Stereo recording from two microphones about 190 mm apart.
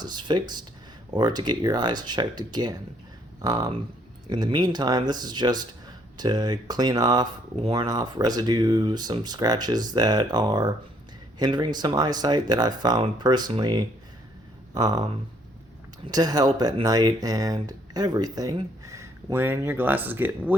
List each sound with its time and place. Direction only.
0.0 s speech: 25° right (ahead or behind)